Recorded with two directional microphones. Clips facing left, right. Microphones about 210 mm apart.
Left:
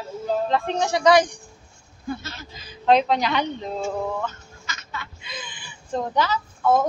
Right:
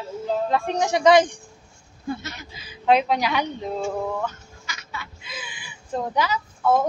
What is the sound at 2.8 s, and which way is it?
Speech, 10° right (ahead or behind).